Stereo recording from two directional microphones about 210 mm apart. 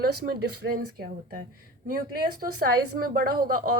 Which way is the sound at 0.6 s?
45° right (ahead or behind).